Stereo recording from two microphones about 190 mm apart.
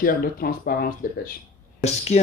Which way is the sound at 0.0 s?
50° left (ahead or behind).